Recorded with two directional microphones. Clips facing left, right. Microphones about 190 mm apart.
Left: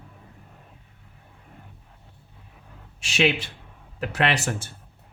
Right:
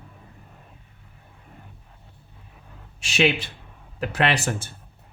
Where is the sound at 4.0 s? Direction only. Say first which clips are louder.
Right 1 dB; 35° right (ahead or behind).